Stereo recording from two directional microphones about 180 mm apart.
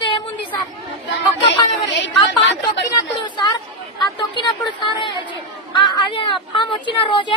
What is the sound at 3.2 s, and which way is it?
Speech, 25° left (ahead or behind).